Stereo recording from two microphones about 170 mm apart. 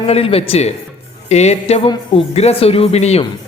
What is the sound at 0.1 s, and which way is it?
Speech, 35° left (ahead or behind).